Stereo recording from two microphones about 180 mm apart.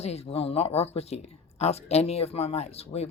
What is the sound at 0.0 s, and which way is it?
Speech, 35° left (ahead or behind).